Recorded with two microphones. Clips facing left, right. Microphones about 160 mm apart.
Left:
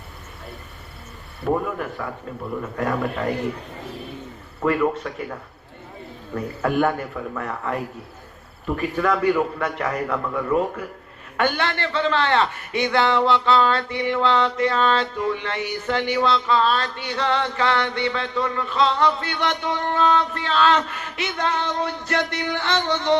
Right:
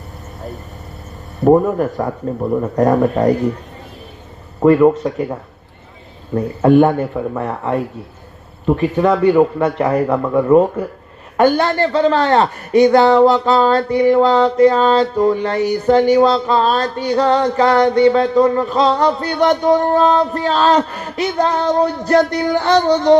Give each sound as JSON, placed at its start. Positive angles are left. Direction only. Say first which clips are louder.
{"t": 1.4, "sound": "a man's voice", "louder": "right 12 dB", "side_deg": -40}
{"t": 4.6, "sound": "a man's voice", "louder": "right 11 dB", "side_deg": -35}